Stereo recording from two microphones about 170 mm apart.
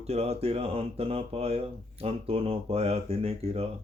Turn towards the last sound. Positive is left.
turn(degrees=-35)  # may be behind; listen again after turning